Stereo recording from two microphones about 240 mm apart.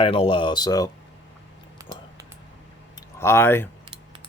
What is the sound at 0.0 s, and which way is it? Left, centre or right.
Speech, left.